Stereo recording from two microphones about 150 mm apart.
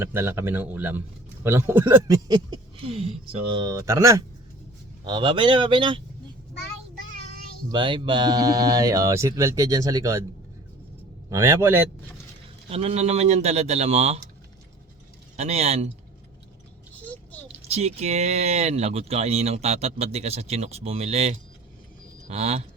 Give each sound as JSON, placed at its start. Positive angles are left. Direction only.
{"t": 0.0, "sound": "a man's voice", "side_deg": -15}
{"t": 2.8, "sound": "speech", "side_deg": -40}
{"t": 5.0, "sound": "speech", "side_deg": -30}
{"t": 7.7, "sound": "speech", "side_deg": -35}
{"t": 11.3, "sound": "a man's voice", "side_deg": -20}
{"t": 12.6, "sound": "speech", "side_deg": -40}
{"t": 15.4, "sound": "speech", "side_deg": -45}
{"t": 17.6, "sound": "speech", "side_deg": -45}